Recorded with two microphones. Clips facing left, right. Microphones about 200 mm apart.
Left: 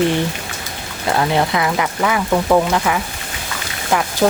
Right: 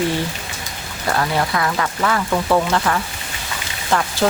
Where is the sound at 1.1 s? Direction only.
20° left (ahead or behind).